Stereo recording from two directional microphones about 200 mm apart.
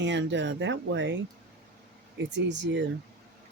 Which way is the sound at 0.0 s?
65° right (ahead or behind).